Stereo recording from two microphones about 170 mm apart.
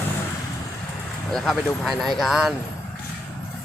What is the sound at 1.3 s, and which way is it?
Speech, centre (ahead or behind).